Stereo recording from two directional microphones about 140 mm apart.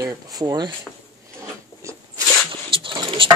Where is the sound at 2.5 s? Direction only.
35° right (ahead or behind).